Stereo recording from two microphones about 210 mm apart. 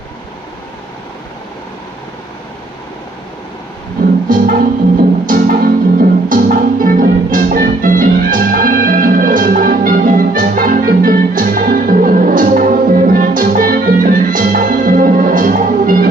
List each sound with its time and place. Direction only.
4.3 s music: 45° right (ahead or behind)